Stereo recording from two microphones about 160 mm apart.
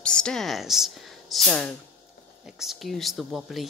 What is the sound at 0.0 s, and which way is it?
Speech, 5° left (ahead or behind).